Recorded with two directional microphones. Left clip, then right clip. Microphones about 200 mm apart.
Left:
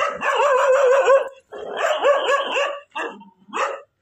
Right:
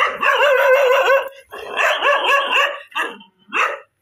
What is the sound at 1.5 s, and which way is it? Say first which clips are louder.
Dog: right 8 dB; 35° left (ahead or behind).